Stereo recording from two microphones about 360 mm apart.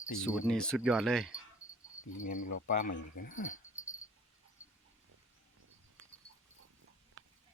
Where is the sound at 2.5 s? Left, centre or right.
Left.